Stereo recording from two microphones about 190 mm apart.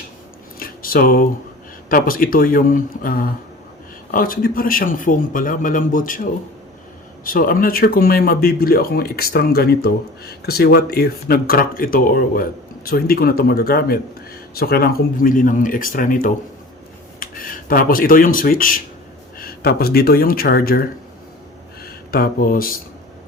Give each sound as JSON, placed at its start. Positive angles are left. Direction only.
{"t": 0.6, "sound": "a sound", "side_deg": 50}
{"t": 1.9, "sound": "speech", "side_deg": 50}
{"t": 7.3, "sound": "speech", "side_deg": 50}
{"t": 21.8, "sound": "speech", "side_deg": 50}